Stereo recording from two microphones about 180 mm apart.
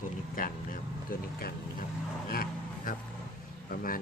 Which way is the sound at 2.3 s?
55° left (ahead or behind).